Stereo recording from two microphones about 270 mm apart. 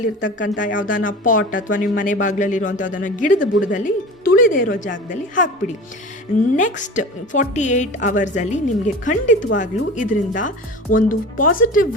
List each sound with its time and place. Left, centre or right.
0.0 s a woman's voice: left